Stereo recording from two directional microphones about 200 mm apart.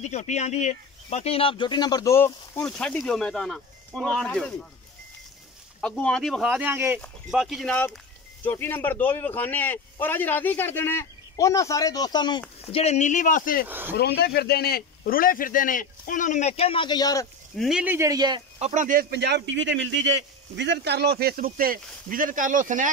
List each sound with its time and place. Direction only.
0.0 s a man's voice: 35° left (ahead or behind); by 4.5 s 5° left (ahead or behind)
5.8 s a man's voice: 5° left (ahead or behind); by 13.7 s 45° left (ahead or behind)
13.7 s speech: 10° right (ahead or behind)
13.9 s a man's voice: 55° left (ahead or behind); by 17.3 s 20° left (ahead or behind)
17.6 s speech: 5° right (ahead or behind); by 18.4 s 20° right (ahead or behind)
18.6 s a man's voice: 35° right (ahead or behind)